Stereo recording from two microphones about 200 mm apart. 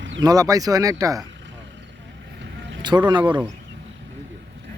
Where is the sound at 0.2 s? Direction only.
20° right (ahead or behind).